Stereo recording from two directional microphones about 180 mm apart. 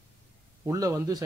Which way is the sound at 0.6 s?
20° right (ahead or behind).